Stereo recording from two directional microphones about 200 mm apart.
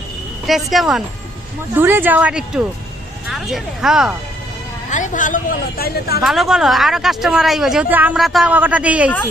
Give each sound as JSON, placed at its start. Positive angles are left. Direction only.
{"t": 0.5, "sound": "a woman's voice", "side_deg": 0}
{"t": 4.9, "sound": "a woman's voice", "side_deg": 40}
{"t": 6.2, "sound": "a woman's voice", "side_deg": 0}